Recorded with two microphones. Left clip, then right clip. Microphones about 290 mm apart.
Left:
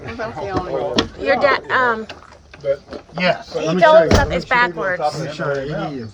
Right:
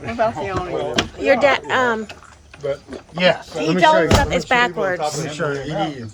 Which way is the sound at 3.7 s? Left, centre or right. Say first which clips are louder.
Left 3 dB; centre.